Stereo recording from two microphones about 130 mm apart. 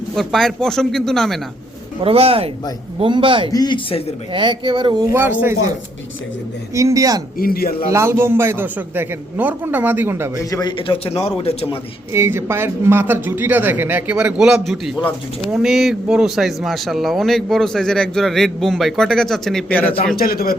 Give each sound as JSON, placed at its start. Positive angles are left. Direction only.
{"t": 0.2, "sound": "speech", "side_deg": 0}
{"t": 2.0, "sound": "a man's voice", "side_deg": -50}
{"t": 3.5, "sound": "a man's voice", "side_deg": 30}
{"t": 4.3, "sound": "speech", "side_deg": -40}
{"t": 5.1, "sound": "speech", "side_deg": -20}
{"t": 6.7, "sound": "speech", "side_deg": -25}
{"t": 10.5, "sound": "a man's voice", "side_deg": 35}
{"t": 12.1, "sound": "speech", "side_deg": -20}